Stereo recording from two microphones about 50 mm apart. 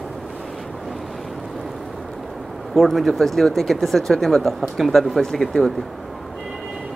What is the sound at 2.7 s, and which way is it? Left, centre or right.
Speech, centre.